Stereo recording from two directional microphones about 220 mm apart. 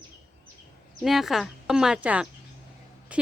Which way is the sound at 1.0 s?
Centre (ahead or behind).